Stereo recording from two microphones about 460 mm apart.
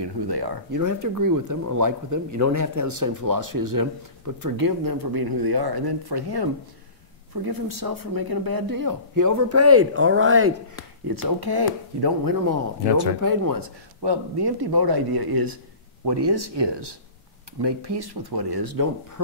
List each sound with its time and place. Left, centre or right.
0.0 s speech: right
7.4 s speech: right
11.1 s speech: right